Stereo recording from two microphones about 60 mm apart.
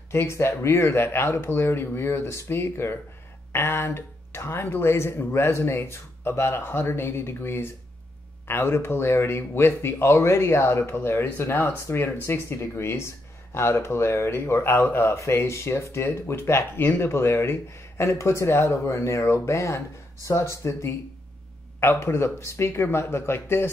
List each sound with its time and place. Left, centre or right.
0.1 s speech: left
4.8 s speech: left